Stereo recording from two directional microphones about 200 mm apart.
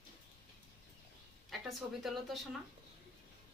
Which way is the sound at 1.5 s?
Centre (ahead or behind).